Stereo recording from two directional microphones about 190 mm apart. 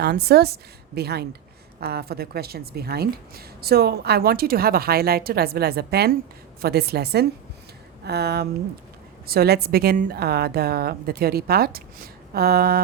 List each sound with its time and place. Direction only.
0.0 s a woman's voice: 55° right (ahead or behind)